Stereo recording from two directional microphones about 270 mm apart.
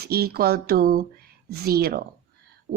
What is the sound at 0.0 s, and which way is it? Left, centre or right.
Speech, right.